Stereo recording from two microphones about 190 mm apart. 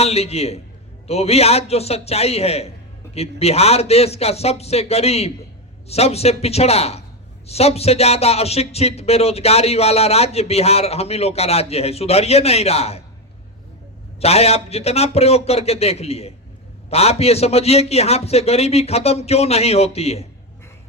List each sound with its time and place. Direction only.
0.0 s speech: 35° left (ahead or behind)
14.2 s speech: 35° left (ahead or behind)